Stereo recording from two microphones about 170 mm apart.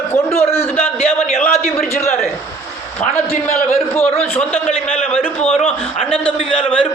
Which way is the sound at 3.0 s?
10° left (ahead or behind).